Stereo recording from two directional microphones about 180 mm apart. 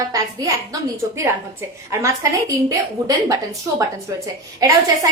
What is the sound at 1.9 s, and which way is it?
Speech, 15° right (ahead or behind).